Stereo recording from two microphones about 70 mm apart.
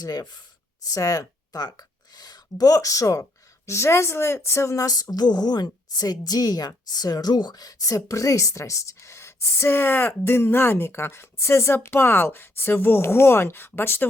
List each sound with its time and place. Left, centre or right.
0.0 s speech: left
0.9 s speech: left
3.7 s speech: left